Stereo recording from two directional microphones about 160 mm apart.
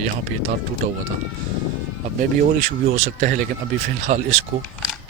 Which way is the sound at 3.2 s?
55° right (ahead or behind).